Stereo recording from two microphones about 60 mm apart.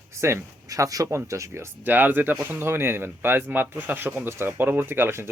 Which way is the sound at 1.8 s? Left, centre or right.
Right.